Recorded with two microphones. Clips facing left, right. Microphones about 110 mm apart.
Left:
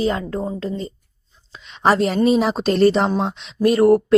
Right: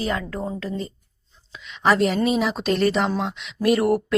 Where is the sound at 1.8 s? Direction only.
35° left (ahead or behind).